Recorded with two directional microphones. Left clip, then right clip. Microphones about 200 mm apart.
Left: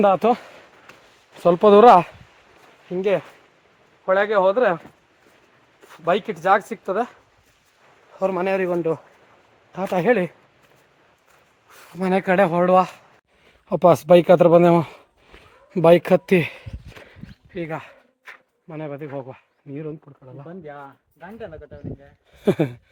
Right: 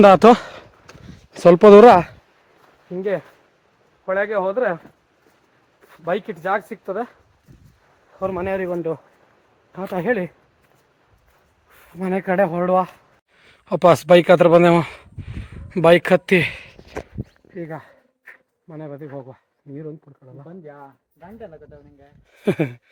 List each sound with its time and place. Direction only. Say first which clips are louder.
0.0 s speech: right 7 dB; 45° right (ahead or behind)
2.9 s speech: left 2 dB; 15° left (ahead or behind)
6.1 s speech: left 4 dB; 15° left (ahead or behind)
8.2 s speech: left 2 dB; 20° left (ahead or behind)
11.9 s speech: left 1 dB; 15° left (ahead or behind)
13.5 s speech: right 1 dB; centre (ahead or behind)
17.5 s speech: left 4 dB; 20° left (ahead or behind)
22.4 s speech: left 1 dB; 10° left (ahead or behind)